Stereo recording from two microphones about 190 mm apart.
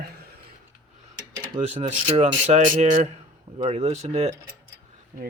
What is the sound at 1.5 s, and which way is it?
Speech, 40° right (ahead or behind).